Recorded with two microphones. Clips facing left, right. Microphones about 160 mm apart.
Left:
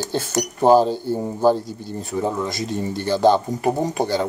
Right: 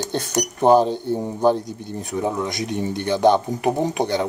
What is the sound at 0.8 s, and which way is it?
Speech, 20° right (ahead or behind).